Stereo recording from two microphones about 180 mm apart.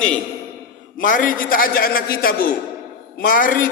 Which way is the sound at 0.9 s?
50° left (ahead or behind).